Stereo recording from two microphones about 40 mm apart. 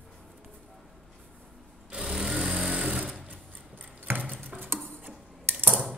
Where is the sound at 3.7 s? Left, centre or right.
Right.